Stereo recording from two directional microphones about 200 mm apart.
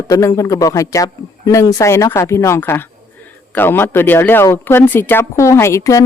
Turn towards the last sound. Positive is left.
turn(degrees=15)  # may be behind; listen again after turning